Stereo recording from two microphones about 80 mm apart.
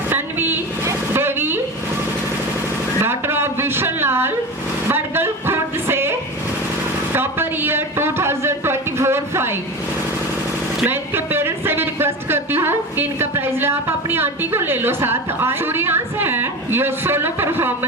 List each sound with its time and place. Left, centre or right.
0.1 s vehicle: right
3.0 s a woman's voice: right
10.8 s speech: right